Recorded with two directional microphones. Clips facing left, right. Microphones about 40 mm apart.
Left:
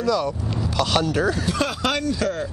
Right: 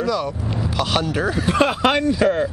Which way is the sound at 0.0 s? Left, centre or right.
Centre.